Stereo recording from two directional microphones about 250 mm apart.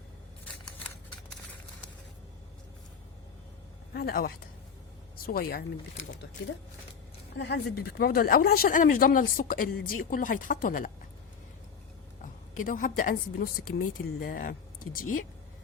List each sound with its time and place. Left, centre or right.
3.9 s speech: left
7.3 s speech: left
12.2 s a woman's voice: left